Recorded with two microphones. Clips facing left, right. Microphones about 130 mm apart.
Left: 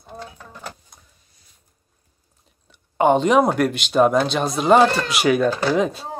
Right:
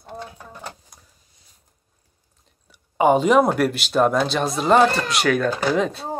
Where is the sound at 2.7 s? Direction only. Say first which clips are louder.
Even; 5° right (ahead or behind).